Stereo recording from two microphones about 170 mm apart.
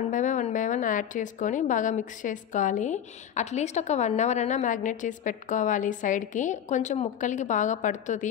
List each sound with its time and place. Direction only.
0.1 s a woman's voice: 45° left (ahead or behind)